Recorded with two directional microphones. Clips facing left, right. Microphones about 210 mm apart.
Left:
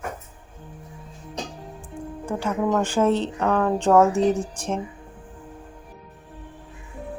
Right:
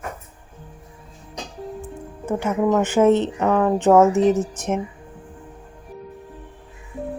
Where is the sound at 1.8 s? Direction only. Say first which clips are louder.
Right 1 dB; 20° right (ahead or behind).